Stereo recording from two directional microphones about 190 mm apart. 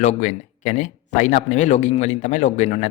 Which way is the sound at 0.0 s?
40° left (ahead or behind).